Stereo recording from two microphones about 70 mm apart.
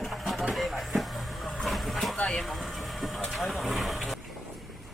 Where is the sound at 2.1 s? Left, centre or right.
Centre.